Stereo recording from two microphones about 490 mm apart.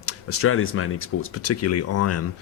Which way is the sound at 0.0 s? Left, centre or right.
Left.